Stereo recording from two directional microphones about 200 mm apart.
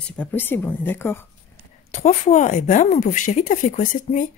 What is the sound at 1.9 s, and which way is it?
A woman's voice, 35° left (ahead or behind).